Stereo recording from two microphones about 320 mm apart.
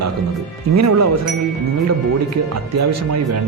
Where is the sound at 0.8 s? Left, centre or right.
Right.